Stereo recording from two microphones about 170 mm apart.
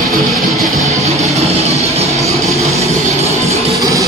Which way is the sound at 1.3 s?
40° right (ahead or behind).